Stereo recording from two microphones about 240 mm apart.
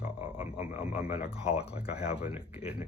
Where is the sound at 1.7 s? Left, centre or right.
Centre.